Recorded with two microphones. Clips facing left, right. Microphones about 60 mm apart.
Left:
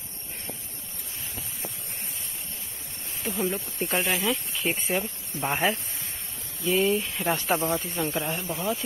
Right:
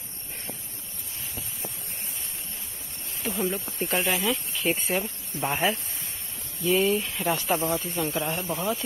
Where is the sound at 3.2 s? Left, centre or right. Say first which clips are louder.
Even; centre.